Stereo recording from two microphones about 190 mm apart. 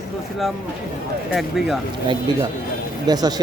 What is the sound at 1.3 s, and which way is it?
Speech, centre (ahead or behind).